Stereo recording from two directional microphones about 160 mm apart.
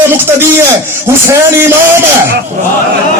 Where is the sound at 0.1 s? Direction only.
15° right (ahead or behind).